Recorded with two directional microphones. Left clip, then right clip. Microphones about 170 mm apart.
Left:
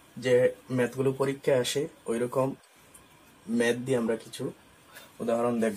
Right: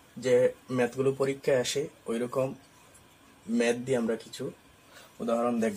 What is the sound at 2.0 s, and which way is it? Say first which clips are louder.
Speech: left 2 dB; 15° left (ahead or behind).